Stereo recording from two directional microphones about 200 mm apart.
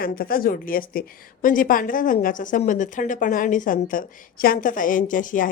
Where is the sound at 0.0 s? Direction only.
45° left (ahead or behind).